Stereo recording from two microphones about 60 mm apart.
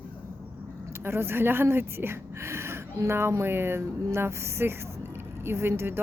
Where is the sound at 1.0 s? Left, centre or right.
Right.